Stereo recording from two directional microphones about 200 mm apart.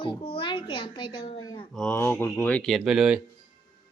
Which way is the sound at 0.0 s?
25° left (ahead or behind).